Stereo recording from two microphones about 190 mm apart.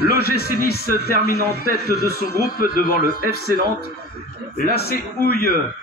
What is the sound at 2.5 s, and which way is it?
A man's voice, 50° left (ahead or behind).